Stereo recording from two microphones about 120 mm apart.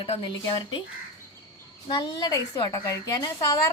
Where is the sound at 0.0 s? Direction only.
45° left (ahead or behind).